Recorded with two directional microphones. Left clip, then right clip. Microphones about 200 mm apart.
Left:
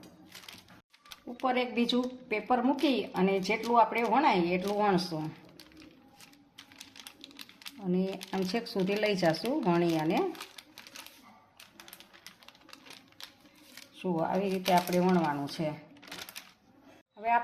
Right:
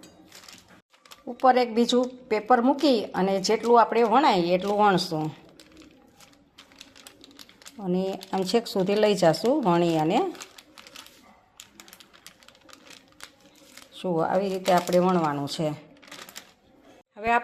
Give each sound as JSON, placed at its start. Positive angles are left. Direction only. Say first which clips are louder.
{"t": 1.2, "sound": "speech", "louder": "right 10 dB", "side_deg": -40}
{"t": 6.9, "sound": "typing", "louder": "even", "side_deg": 5}
{"t": 7.9, "sound": "speech", "louder": "right 6 dB", "side_deg": -40}
{"t": 13.9, "sound": "speech", "louder": "right 7 dB", "side_deg": -45}
{"t": 17.2, "sound": "speech", "louder": "right 4 dB", "side_deg": -55}